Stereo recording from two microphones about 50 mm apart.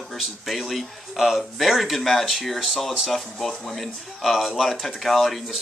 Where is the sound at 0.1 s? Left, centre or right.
Centre.